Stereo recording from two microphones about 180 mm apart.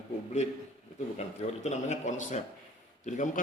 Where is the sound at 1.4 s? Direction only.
40° left (ahead or behind).